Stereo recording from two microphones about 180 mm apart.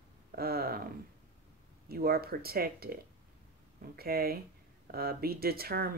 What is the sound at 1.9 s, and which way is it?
Speech, 60° right (ahead or behind).